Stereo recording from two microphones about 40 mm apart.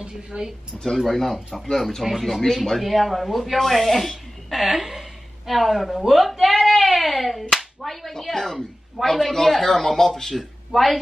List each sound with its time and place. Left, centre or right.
0.0 s speech: right
0.9 s speech: centre
2.4 s speech: centre
2.8 s speech: centre
4.5 s a woman's voice: centre
10.3 s speech: centre